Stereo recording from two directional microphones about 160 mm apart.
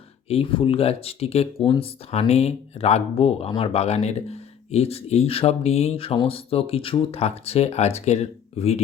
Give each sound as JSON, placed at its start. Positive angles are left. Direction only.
{"t": 0.3, "sound": "speech", "side_deg": 35}